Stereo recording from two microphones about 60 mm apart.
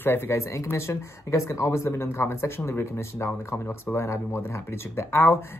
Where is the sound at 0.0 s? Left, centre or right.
Left.